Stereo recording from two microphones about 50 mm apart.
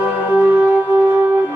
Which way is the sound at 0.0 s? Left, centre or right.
Right.